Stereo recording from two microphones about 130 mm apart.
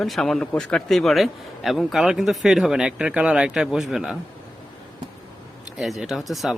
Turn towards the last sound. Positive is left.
turn(degrees=0)  # may be behind; listen again after turning